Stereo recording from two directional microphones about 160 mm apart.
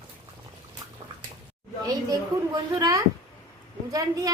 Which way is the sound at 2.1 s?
25° right (ahead or behind).